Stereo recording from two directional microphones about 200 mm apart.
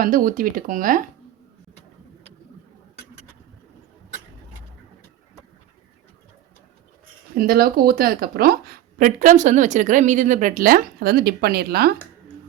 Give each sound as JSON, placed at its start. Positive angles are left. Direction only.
{"t": 0.0, "sound": "a woman's voice", "side_deg": -45}
{"t": 7.3, "sound": "a woman's voice", "side_deg": -50}